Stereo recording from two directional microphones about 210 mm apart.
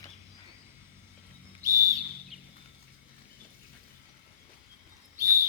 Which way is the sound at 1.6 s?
15° right (ahead or behind).